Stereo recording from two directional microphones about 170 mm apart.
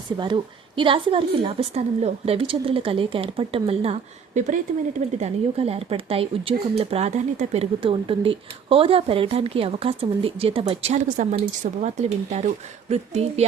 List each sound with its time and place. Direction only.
0.2 s a woman's voice: 25° right (ahead or behind)